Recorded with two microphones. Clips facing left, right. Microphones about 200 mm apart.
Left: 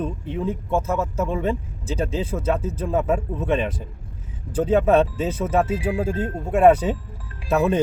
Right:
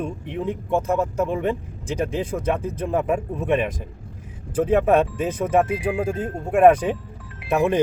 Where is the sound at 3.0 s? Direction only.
15° right (ahead or behind).